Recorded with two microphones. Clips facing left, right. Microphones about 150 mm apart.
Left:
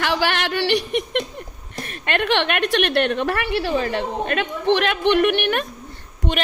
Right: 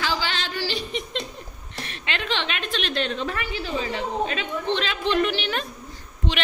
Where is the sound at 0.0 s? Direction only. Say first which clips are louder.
Left 6 dB; 65° left (ahead or behind).